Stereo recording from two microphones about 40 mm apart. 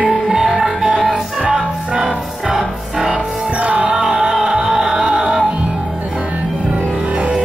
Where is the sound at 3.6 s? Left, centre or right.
Right.